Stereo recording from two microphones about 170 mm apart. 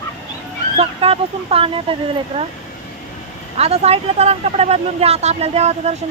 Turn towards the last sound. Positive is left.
turn(degrees=-40)  # may be behind; listen again after turning